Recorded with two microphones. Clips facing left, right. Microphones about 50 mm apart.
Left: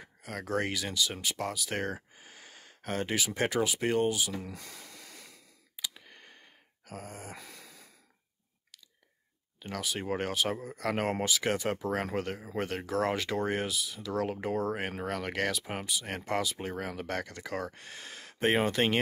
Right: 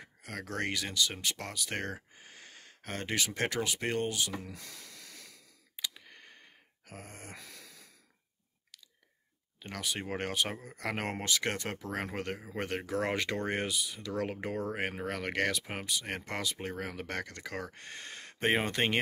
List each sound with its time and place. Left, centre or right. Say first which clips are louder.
0.0 s speech: left 2 dB; centre
4.5 s hiss: left 3 dB; left
5.8 s clicking: even; centre
6.9 s speech: left 5 dB; centre
7.3 s a sound: left 2 dB; centre
9.6 s speech: left 2 dB; centre